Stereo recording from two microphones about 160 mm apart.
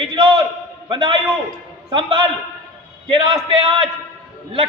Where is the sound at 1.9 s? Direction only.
35° right (ahead or behind).